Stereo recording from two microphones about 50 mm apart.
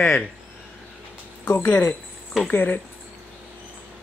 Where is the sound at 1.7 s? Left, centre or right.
Left.